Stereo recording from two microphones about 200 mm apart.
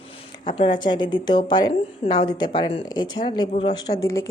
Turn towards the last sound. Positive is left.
turn(degrees=15)  # may be behind; listen again after turning